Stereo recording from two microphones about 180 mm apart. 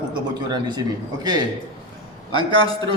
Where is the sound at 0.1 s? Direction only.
25° right (ahead or behind).